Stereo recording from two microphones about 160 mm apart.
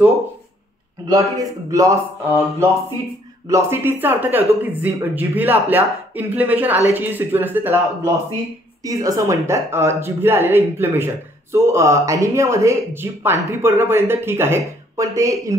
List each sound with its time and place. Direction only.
1.0 s speech: 20° right (ahead or behind)